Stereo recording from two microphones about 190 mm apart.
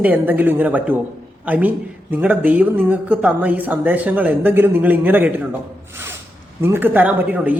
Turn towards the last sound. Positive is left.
turn(degrees=-10)  # may be behind; listen again after turning